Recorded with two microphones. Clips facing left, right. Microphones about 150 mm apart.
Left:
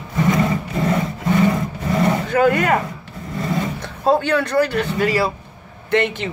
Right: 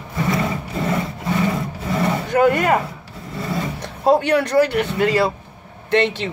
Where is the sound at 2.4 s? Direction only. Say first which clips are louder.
Right 1 dB; 20° right (ahead or behind).